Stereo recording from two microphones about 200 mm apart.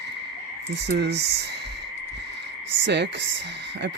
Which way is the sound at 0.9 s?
55° right (ahead or behind).